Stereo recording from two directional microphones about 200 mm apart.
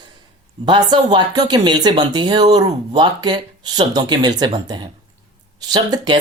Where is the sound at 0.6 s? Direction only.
20° right (ahead or behind).